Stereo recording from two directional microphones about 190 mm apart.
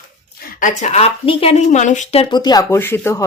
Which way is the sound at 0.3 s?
40° left (ahead or behind).